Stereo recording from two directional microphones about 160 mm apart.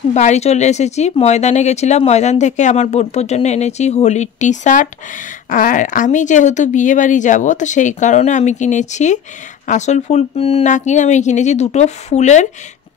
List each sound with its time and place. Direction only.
0.1 s a woman's voice: 45° left (ahead or behind)